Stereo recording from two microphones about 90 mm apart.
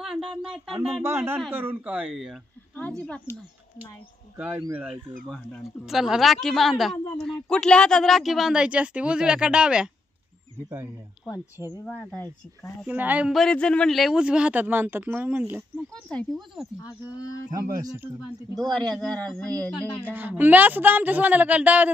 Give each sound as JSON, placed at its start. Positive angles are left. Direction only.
{"t": 0.0, "sound": "a woman's voice", "side_deg": -5}
{"t": 1.0, "sound": "a woman's voice", "side_deg": -25}
{"t": 2.0, "sound": "a woman's voice", "side_deg": -5}
{"t": 2.9, "sound": "speech", "side_deg": 15}
{"t": 4.4, "sound": "speech", "side_deg": -15}
{"t": 5.9, "sound": "a woman's voice", "side_deg": -5}
{"t": 11.8, "sound": "speech", "side_deg": 20}
{"t": 12.8, "sound": "a woman's voice", "side_deg": -20}
{"t": 13.3, "sound": "speech", "side_deg": 5}
{"t": 15.9, "sound": "speech", "side_deg": 10}
{"t": 17.5, "sound": "speech", "side_deg": -45}
{"t": 18.6, "sound": "a woman's voice", "side_deg": 5}
{"t": 20.0, "sound": "a woman's voice", "side_deg": -20}